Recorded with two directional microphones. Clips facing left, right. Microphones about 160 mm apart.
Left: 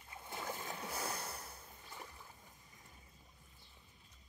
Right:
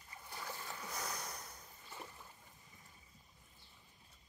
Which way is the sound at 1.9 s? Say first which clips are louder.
Right 2 dB; 15° right (ahead or behind).